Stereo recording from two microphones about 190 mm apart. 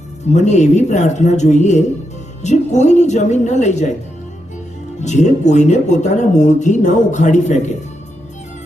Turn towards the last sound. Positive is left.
turn(degrees=40)  # may be behind; listen again after turning